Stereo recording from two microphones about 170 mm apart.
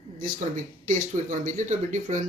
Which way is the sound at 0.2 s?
50° right (ahead or behind).